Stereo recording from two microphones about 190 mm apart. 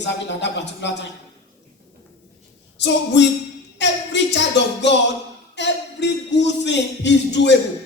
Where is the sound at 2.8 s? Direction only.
70° left (ahead or behind).